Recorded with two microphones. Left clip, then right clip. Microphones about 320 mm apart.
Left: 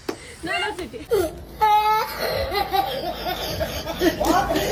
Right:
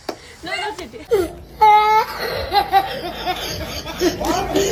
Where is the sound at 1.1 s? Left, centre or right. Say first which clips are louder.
Right 3 dB; centre.